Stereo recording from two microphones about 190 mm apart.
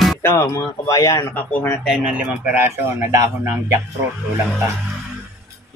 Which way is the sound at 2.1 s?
5° right (ahead or behind).